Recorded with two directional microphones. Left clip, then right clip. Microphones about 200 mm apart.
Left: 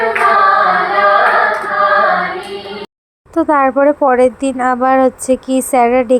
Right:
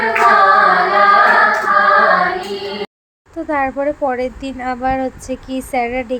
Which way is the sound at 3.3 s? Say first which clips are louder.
Left 7 dB; 35° left (ahead or behind).